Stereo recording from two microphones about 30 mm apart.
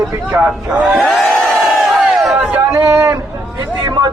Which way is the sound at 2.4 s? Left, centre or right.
Right.